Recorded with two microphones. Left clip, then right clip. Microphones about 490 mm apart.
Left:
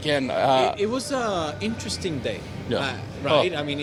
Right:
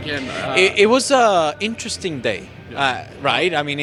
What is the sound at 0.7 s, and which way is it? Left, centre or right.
A man's voice, right.